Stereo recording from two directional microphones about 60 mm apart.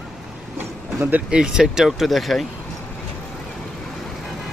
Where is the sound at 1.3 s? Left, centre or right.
Centre.